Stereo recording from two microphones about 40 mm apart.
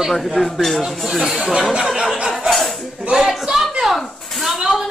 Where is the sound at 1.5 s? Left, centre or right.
Centre.